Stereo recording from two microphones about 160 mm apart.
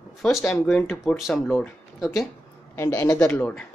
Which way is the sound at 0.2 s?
5° left (ahead or behind).